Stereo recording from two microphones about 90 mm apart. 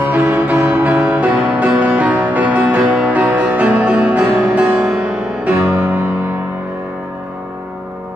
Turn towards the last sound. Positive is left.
turn(degrees=-20)  # may be behind; listen again after turning